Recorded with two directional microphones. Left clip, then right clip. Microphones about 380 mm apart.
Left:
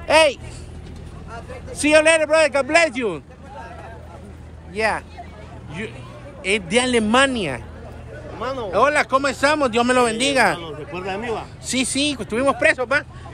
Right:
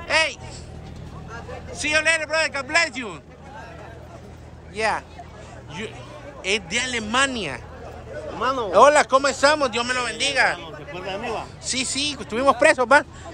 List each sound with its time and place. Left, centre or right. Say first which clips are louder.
0.0 s speech: left 6 dB; centre
1.7 s speech: left 6 dB; centre
4.7 s speech: left 2 dB; centre
6.4 s speech: left 4 dB; centre
8.4 s speech: right 3 dB; right
8.7 s speech: right 3 dB; centre
10.6 s speech: left 4 dB; centre